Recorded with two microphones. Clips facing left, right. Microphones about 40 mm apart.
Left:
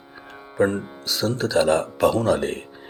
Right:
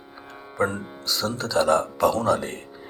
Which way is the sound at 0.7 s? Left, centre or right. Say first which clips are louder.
Left 3 dB; centre.